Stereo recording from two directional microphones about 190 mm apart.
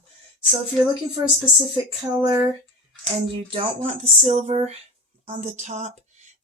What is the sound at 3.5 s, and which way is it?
Speech, 30° right (ahead or behind).